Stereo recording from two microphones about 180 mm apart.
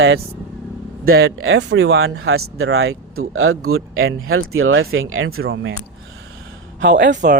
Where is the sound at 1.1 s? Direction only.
70° right (ahead or behind); by 3.0 s 90° right.